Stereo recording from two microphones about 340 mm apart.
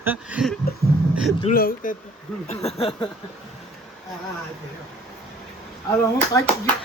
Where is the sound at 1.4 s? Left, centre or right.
Left.